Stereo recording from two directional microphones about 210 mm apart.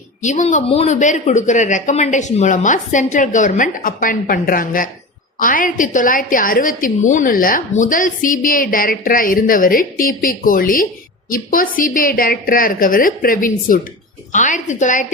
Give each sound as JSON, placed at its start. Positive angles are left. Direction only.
{"t": 0.2, "sound": "a woman's voice", "side_deg": 35}